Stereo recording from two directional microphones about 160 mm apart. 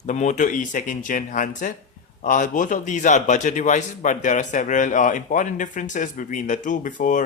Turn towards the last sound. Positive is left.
turn(degrees=55)  # may be behind; listen again after turning